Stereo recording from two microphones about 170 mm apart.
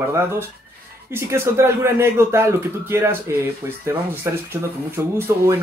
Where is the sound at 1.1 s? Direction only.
15° right (ahead or behind).